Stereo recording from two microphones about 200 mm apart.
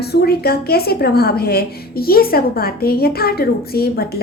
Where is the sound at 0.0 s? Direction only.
50° left (ahead or behind).